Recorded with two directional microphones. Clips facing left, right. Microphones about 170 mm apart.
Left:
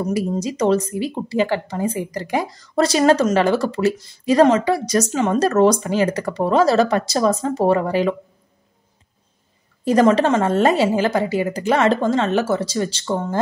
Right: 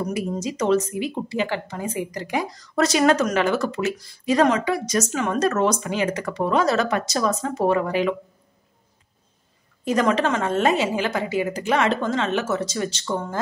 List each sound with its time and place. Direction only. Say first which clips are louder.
0.1 s speech: left 4 dB; 35° left (ahead or behind)
9.8 s speech: left 6 dB; 35° left (ahead or behind)